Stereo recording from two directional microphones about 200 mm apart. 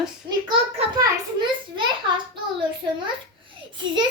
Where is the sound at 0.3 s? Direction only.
20° right (ahead or behind).